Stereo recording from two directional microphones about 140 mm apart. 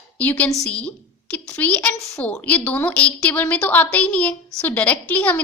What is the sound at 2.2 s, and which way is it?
A woman's voice, 10° left (ahead or behind).